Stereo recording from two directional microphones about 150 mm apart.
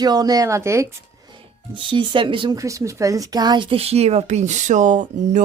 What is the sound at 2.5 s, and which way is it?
Speech, 20° right (ahead or behind).